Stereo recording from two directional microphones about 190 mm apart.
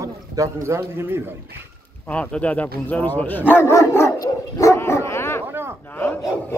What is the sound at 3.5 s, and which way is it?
Dog, 15° left (ahead or behind).